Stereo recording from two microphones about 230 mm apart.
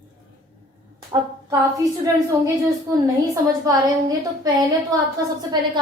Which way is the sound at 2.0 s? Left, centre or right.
Centre.